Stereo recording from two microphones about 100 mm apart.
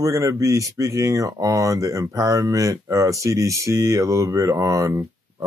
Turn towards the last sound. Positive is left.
turn(degrees=-35)  # may be behind; listen again after turning